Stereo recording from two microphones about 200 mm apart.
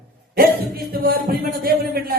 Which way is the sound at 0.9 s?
50° right (ahead or behind).